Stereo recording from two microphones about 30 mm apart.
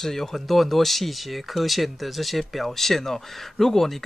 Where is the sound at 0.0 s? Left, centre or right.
Centre.